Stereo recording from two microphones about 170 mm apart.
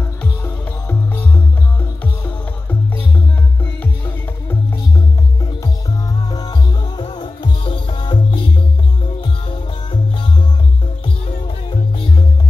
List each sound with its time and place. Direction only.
0.8 s music: 10° left (ahead or behind)
3.8 s music: 10° left (ahead or behind)
7.0 s music: 25° left (ahead or behind)